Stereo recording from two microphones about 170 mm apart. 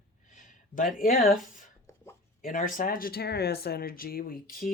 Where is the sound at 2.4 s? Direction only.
50° left (ahead or behind).